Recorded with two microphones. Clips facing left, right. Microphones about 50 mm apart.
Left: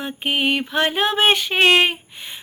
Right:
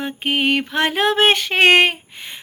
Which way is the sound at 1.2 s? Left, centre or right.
Right.